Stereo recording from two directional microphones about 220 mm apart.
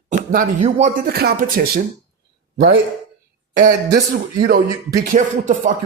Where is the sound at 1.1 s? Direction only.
45° right (ahead or behind).